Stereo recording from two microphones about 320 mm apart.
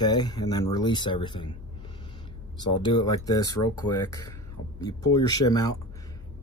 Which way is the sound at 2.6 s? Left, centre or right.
Centre.